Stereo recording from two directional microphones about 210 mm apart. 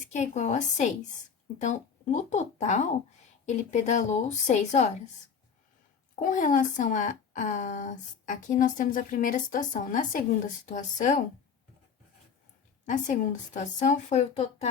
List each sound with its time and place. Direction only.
0.1 s a woman's voice: 35° left (ahead or behind)
6.1 s a woman's voice: 40° left (ahead or behind)
12.8 s a woman's voice: 35° left (ahead or behind)